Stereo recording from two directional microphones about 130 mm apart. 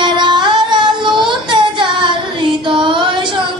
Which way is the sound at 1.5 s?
35° right (ahead or behind).